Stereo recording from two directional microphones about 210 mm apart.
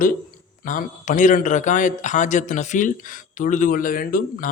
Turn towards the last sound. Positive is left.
turn(degrees=40)  # may be behind; listen again after turning